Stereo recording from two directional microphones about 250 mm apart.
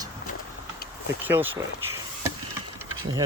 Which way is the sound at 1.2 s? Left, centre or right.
Centre.